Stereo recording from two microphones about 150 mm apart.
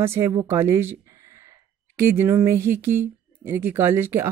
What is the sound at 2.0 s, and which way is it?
Speech, 15° right (ahead or behind).